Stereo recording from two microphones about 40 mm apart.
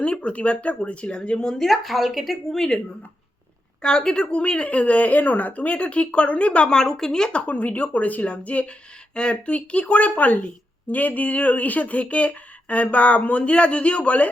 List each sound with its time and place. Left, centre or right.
0.0 s speech: left
1.4 s a woman's voice: centre
2.6 s a woman's voice: centre; by 6.7 s left
6.7 s a woman's voice: centre
7.3 s speech: left